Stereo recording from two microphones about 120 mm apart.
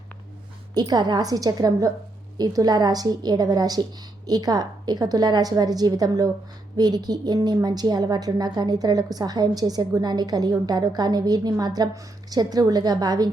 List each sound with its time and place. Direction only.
0.7 s a woman's voice: 35° right (ahead or behind)